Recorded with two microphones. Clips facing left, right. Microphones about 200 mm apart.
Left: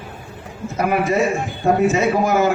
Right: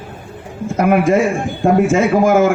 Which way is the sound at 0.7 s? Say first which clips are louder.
Right 6 dB; 50° right (ahead or behind).